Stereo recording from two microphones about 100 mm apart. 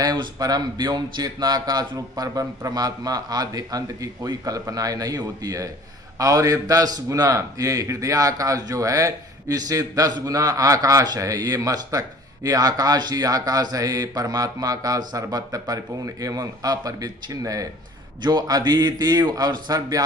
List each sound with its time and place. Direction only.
0.0 s a man's voice: 40° right (ahead or behind)